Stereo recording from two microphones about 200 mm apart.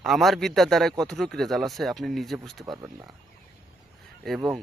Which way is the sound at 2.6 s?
20° right (ahead or behind).